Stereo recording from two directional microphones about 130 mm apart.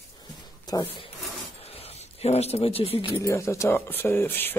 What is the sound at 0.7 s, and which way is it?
Speech, 30° left (ahead or behind).